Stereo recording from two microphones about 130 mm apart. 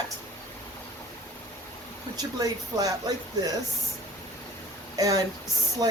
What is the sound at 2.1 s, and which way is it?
Speech, 30° right (ahead or behind).